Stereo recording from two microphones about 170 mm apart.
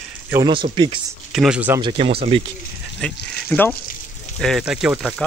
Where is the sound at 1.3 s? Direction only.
5° right (ahead or behind).